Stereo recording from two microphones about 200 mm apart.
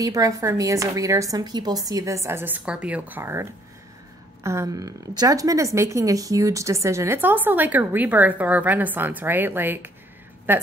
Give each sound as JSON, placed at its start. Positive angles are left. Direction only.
{"t": 0.0, "sound": "a woman's voice", "side_deg": -15}